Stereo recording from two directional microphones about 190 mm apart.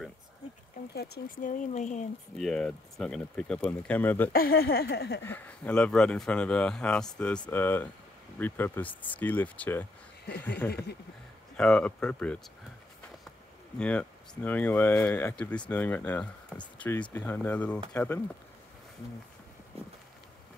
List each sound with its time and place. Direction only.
0.9 s speech: 60° left (ahead or behind)
1.6 s speech: 40° left (ahead or behind)
2.3 s speech: centre (ahead or behind)
4.3 s speech: 50° left (ahead or behind)
5.2 s speech: 10° left (ahead or behind)
11.5 s speech: 5° left (ahead or behind)
13.7 s speech: 5° left (ahead or behind)